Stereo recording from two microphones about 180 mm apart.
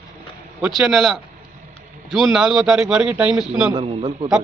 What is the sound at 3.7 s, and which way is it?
Speech, 30° right (ahead or behind).